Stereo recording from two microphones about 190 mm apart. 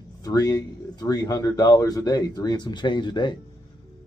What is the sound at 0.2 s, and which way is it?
Speech, 20° left (ahead or behind).